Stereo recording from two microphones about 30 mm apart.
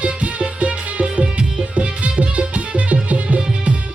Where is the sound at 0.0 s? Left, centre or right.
Right.